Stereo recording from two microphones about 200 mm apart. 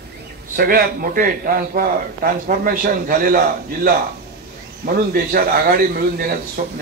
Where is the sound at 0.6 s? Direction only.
45° right (ahead or behind).